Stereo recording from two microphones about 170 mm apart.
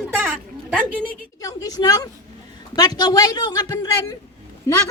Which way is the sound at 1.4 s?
20° left (ahead or behind).